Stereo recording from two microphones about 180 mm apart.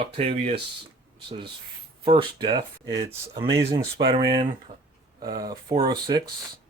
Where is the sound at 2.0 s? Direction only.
25° right (ahead or behind).